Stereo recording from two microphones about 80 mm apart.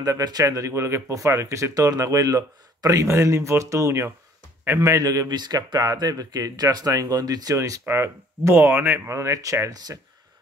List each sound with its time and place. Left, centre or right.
0.0 s speech: right
4.7 s speech: right
7.8 s speech: right